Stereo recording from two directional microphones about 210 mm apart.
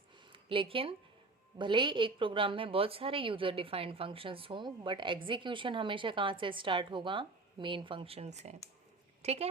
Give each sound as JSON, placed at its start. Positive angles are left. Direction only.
{"t": 0.3, "sound": "a woman's voice", "side_deg": -25}